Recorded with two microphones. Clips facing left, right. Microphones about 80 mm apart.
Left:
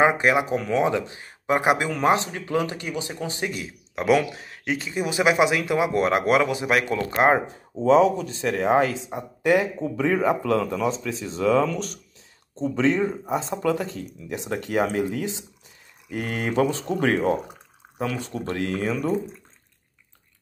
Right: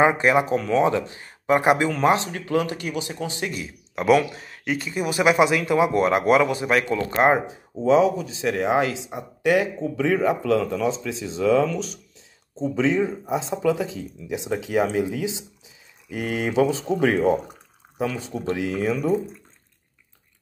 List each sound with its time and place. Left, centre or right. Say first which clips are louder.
0.0 s speech: right 1 dB; centre